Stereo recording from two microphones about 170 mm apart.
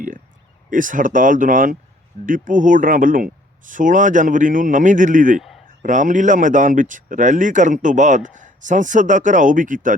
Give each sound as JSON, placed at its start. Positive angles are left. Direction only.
{"t": 0.7, "sound": "speech", "side_deg": -50}